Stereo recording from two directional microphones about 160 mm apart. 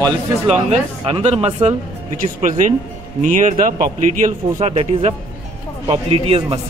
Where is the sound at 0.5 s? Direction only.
40° right (ahead or behind).